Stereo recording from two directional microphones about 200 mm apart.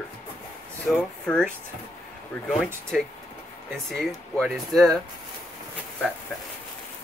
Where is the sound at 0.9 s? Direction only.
Centre (ahead or behind).